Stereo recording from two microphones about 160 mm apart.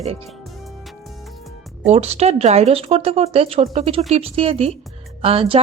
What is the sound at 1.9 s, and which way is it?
A woman's voice, 40° right (ahead or behind).